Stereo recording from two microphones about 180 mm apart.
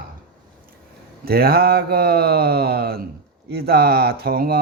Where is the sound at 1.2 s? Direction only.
60° right (ahead or behind).